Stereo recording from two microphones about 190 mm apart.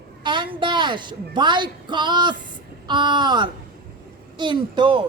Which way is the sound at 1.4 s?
25° right (ahead or behind).